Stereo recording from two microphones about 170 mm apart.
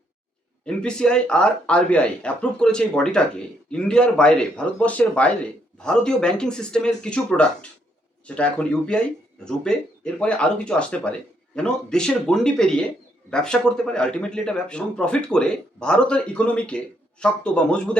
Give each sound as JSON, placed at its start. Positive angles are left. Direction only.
{"t": 0.6, "sound": "speech", "side_deg": 5}